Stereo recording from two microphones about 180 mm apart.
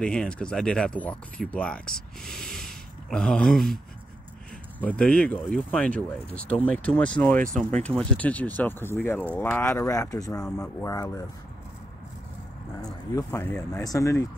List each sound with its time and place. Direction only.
0.0 s speech: 5° left (ahead or behind)
12.8 s speech: 15° left (ahead or behind)